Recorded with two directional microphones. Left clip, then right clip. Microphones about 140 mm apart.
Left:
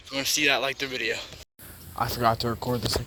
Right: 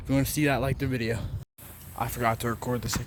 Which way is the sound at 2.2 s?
5° left (ahead or behind).